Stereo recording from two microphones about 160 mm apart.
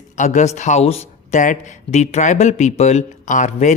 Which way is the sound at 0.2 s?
45° left (ahead or behind).